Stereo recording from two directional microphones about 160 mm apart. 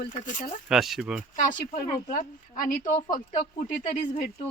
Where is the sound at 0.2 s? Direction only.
50° left (ahead or behind).